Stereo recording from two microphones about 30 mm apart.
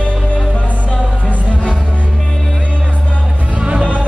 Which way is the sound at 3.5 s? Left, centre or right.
Right.